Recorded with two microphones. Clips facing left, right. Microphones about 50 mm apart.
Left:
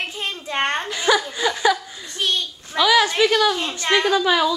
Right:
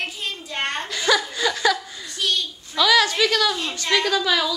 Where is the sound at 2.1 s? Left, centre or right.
Left.